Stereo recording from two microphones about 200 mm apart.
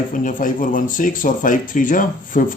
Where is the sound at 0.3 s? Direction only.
40° left (ahead or behind).